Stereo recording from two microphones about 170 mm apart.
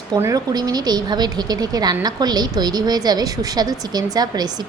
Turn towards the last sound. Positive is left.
turn(degrees=-25)  # may be behind; listen again after turning